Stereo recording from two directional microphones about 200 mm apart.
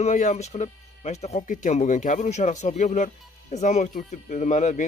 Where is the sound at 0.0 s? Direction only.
35° left (ahead or behind).